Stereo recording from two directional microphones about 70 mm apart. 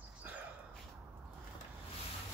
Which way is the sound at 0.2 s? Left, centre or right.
Right.